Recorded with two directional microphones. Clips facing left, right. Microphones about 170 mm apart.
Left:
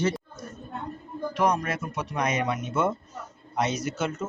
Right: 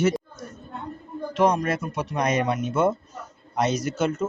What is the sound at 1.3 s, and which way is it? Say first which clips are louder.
Speech: right 4 dB; 25° right (ahead or behind).